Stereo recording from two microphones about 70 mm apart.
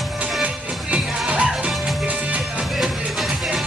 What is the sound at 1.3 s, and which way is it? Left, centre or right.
Music, centre.